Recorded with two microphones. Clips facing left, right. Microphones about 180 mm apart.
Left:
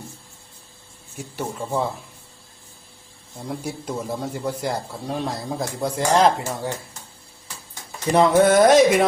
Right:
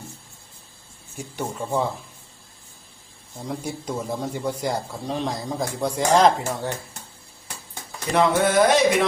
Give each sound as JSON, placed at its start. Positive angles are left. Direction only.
{"t": 1.2, "sound": "speech", "side_deg": 0}
{"t": 3.4, "sound": "speech", "side_deg": 0}
{"t": 8.1, "sound": "speech", "side_deg": 45}